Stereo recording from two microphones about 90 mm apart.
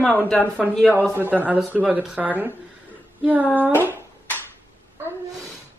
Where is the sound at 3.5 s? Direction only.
20° right (ahead or behind).